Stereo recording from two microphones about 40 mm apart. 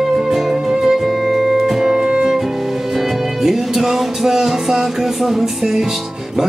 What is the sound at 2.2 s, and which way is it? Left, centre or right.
Music, centre.